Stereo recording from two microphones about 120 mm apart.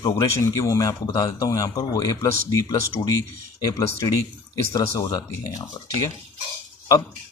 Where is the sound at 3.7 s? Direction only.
30° left (ahead or behind).